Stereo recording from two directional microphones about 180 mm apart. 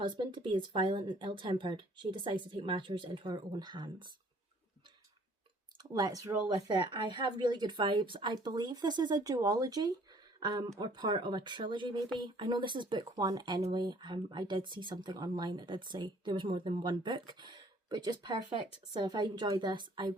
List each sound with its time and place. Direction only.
0.0 s speech: 25° right (ahead or behind)
5.7 s speech: 20° right (ahead or behind)